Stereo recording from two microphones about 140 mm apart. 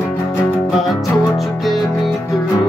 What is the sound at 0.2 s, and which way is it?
Music, 25° left (ahead or behind).